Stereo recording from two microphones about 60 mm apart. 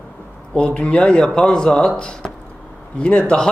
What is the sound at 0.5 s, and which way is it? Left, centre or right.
A man's voice, centre.